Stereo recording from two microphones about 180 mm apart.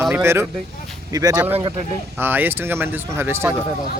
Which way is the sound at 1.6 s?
25° right (ahead or behind).